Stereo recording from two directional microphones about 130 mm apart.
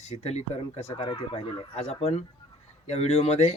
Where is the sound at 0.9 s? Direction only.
40° left (ahead or behind).